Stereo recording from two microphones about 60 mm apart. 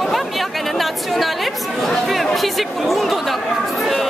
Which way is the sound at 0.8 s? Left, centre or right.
Centre.